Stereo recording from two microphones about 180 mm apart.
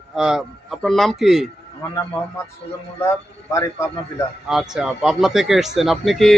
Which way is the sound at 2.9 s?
15° left (ahead or behind).